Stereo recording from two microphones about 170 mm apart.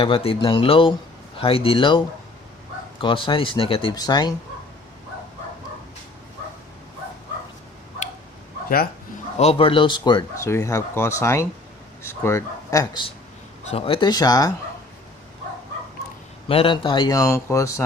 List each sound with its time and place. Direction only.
0.0 s speech: 35° left (ahead or behind)
9.4 s speech: 35° left (ahead or behind)
13.7 s speech: 35° left (ahead or behind)
16.5 s speech: 30° left (ahead or behind)